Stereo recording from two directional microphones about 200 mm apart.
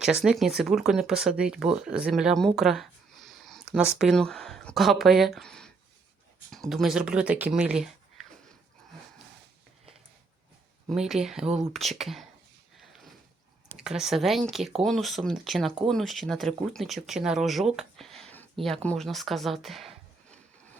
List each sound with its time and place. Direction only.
0.0 s speech: 5° right (ahead or behind)
10.8 s speech: centre (ahead or behind)
12.8 s a sound: centre (ahead or behind)
13.7 s speech: 5° right (ahead or behind)